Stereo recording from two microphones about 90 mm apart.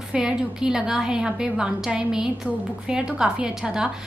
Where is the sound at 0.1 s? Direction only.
10° right (ahead or behind).